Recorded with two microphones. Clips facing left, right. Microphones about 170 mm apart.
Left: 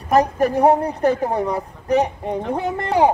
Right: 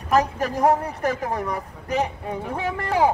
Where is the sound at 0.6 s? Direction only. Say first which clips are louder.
Left 3 dB; 30° left (ahead or behind).